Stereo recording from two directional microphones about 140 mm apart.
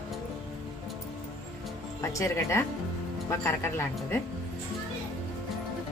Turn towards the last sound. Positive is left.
turn(degrees=15)  # may be behind; listen again after turning